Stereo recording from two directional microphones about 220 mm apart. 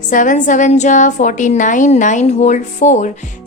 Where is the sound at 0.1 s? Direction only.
35° left (ahead or behind).